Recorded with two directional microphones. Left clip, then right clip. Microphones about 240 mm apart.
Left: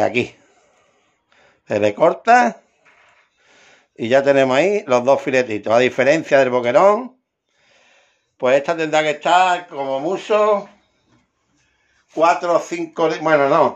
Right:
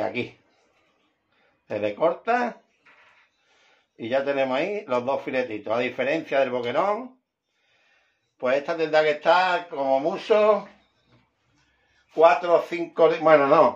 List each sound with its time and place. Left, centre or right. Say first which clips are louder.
0.0 s speech: left 10 dB; left
1.7 s speech: left 8 dB; left
3.9 s speech: left 10 dB; left
8.4 s speech: left 7 dB; left
12.2 s speech: left 2 dB; left
13.2 s speech: left 4 dB; left